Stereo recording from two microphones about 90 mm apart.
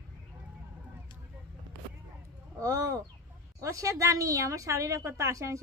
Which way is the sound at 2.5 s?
35° right (ahead or behind).